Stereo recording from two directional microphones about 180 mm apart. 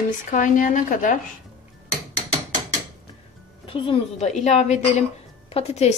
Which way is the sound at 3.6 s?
30° left (ahead or behind).